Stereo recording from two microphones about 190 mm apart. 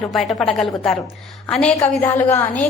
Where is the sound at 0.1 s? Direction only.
Centre (ahead or behind).